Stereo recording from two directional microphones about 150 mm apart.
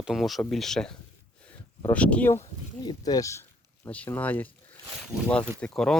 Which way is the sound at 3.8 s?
10° left (ahead or behind).